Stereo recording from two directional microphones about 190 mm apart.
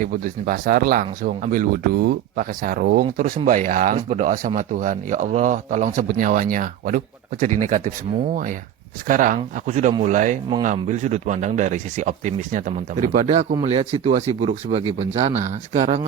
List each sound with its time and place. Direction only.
0.0 s speech: 50° right (ahead or behind)
9.0 s speech: 45° right (ahead or behind)